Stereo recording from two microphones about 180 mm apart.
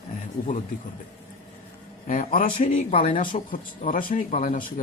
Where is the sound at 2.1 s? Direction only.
45° left (ahead or behind).